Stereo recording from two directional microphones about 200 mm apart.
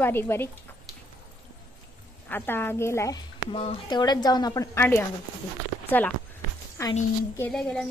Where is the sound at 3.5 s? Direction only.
25° left (ahead or behind); by 6.1 s 10° left (ahead or behind).